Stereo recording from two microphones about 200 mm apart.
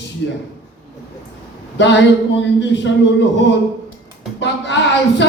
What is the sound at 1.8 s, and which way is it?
A man's voice, 60° left (ahead or behind).